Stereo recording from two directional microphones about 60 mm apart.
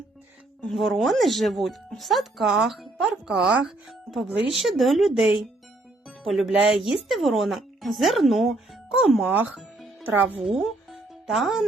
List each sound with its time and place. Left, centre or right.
0.8 s speech: centre
3.0 s speech: centre
4.5 s speech: centre
5.2 s speech: centre
6.1 s music: centre
6.5 s speech: centre
9.3 s speech: right
10.6 s music: centre